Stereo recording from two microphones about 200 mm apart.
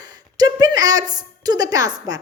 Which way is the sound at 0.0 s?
20° right (ahead or behind).